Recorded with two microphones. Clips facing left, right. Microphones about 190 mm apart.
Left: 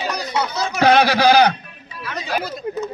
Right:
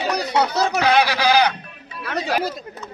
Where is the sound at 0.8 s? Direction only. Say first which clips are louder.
Left 6 dB; 45° left (ahead or behind).